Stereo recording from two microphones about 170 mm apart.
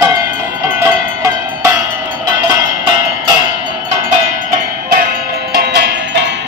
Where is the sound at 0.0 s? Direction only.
20° right (ahead or behind).